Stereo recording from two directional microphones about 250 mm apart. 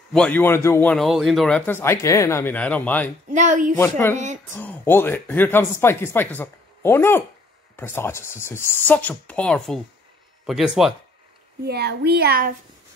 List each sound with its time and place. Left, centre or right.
0.1 s a man's voice: centre
3.3 s speech: right
3.7 s a man's voice: centre
11.6 s speech: right